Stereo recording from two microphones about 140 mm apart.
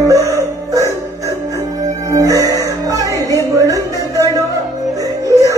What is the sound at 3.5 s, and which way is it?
Music, 25° right (ahead or behind).